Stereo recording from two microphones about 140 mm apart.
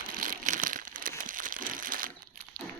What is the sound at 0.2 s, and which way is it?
Crumpling, 70° right (ahead or behind).